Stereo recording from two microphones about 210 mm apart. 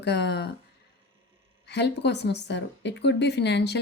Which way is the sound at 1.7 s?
55° left (ahead or behind).